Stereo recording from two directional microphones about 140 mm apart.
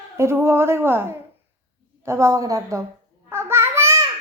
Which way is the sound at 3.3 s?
15° right (ahead or behind).